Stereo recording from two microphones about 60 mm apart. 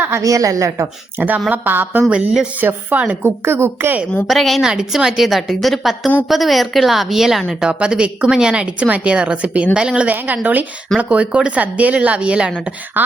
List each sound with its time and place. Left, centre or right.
0.2 s a woman's voice: right
1.5 s speech: right
2.1 s a woman's voice: centre
2.6 s speech: right
3.2 s speech: right
4.3 s a woman's voice: centre
4.6 s a woman's voice: centre
12.9 s speech: right